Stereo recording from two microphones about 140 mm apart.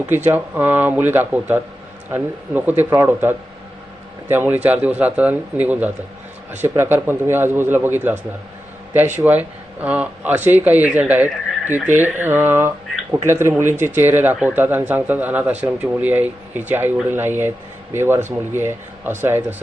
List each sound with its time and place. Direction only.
0.1 s speech: 15° right (ahead or behind)